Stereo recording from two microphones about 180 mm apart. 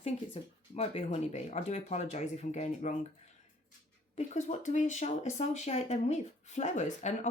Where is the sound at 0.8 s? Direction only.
35° left (ahead or behind).